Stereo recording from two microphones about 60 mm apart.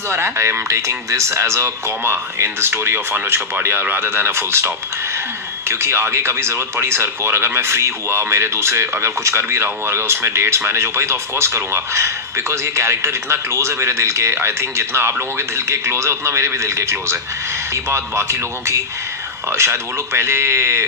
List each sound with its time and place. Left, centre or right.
0.1 s speech: right